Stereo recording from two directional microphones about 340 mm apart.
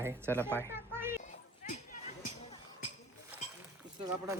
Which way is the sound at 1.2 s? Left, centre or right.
Left.